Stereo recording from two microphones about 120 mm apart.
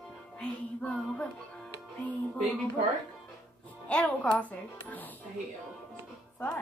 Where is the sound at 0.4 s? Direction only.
10° left (ahead or behind).